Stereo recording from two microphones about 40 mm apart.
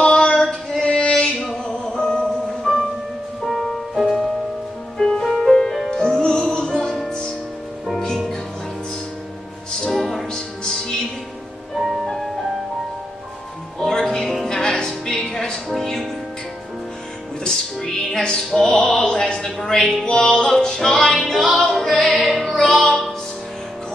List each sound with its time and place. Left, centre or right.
0.0 s a sound: left
0.8 s a sound: left
1.6 s music: left
2.2 s music: centre
4.9 s music: centre
5.6 s music: centre
9.8 s music: centre
10.3 s music: centre
11.7 s music: centre
13.7 s music: centre
17.4 s music: centre
19.0 s a sound: left
20.1 s music: centre